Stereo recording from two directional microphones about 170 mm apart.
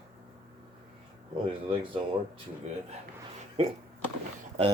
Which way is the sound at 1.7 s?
30° right (ahead or behind).